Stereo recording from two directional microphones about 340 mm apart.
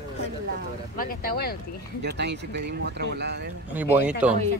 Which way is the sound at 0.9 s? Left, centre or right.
Left.